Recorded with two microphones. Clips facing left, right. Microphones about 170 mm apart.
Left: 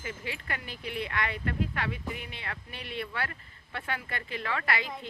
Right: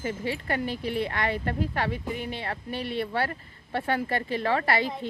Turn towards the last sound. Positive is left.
turn(degrees=-35)  # may be behind; listen again after turning